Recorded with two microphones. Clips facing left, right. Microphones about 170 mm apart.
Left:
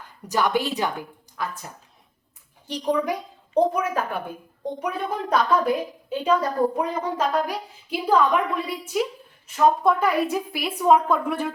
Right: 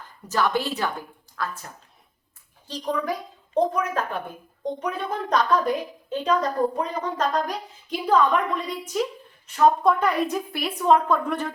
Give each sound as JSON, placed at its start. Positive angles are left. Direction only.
{"t": 0.3, "sound": "a woman's voice", "side_deg": 15}